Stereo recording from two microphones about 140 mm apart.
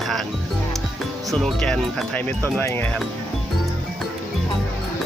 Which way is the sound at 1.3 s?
Centre (ahead or behind).